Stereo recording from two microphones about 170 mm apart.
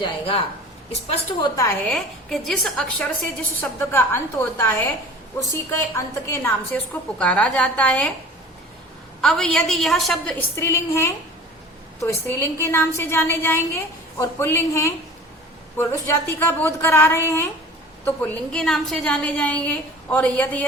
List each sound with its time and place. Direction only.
0.0 s a woman's voice: 35° left (ahead or behind)
1.9 s a woman's voice: centre (ahead or behind)
3.6 s a woman's voice: 15° left (ahead or behind)
9.2 s a woman's voice: 5° left (ahead or behind)